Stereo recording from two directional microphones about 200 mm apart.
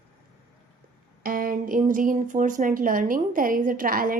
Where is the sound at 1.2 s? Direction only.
45° right (ahead or behind).